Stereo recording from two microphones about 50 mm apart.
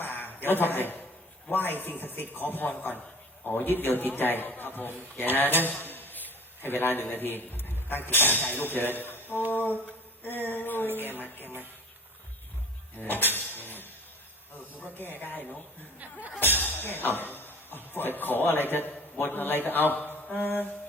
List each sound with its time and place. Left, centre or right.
0.0 s a sound: left
1.5 s a man's voice: left
5.6 s a sound: left
6.6 s a man's voice: left
9.5 s a sound: left
10.9 s a man's voice: left
13.0 s speech: left
14.8 s a man's voice: left
16.4 s a man's voice: left